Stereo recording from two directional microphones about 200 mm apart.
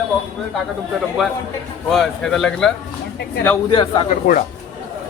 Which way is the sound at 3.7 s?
25° left (ahead or behind).